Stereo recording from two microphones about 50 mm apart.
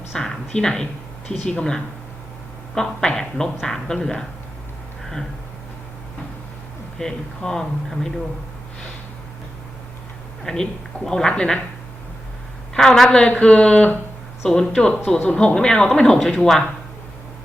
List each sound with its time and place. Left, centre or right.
0.1 s speech: centre
7.0 s speech: centre
10.4 s speech: centre
12.7 s speech: centre